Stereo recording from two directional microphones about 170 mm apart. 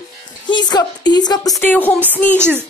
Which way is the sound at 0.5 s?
25° left (ahead or behind).